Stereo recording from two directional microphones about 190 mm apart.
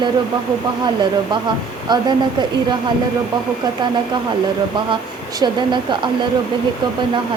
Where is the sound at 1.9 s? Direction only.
20° right (ahead or behind).